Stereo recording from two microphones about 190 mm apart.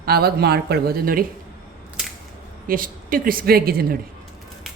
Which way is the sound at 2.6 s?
45° right (ahead or behind).